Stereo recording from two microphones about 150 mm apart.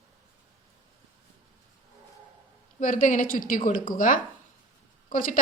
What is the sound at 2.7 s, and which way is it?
Speech, 55° left (ahead or behind).